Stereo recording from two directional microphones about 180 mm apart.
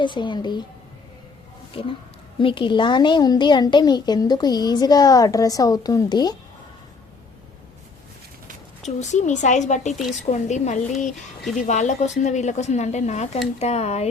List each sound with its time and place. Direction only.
0.0 s a woman's voice: 25° left (ahead or behind)
2.4 s a woman's voice: 30° left (ahead or behind)
8.8 s speech: 40° left (ahead or behind)